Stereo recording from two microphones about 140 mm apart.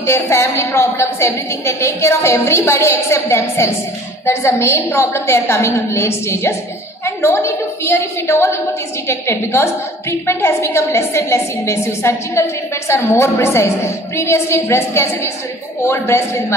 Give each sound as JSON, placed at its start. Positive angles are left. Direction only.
{"t": 0.0, "sound": "a woman's voice", "side_deg": 20}